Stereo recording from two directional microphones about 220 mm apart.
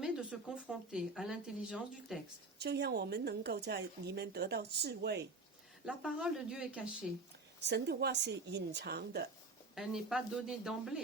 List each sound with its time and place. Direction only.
0.0 s speech: 5° right (ahead or behind)
2.6 s speech: 50° right (ahead or behind)
5.8 s speech: centre (ahead or behind)
7.6 s speech: 50° right (ahead or behind)
9.7 s speech: centre (ahead or behind)